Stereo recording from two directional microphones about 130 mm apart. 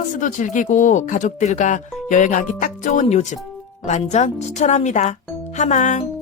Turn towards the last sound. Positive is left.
turn(degrees=70)  # may be behind; listen again after turning